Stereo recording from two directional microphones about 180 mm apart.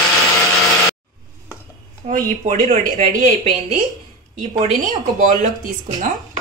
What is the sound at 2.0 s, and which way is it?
A woman's voice, 45° right (ahead or behind).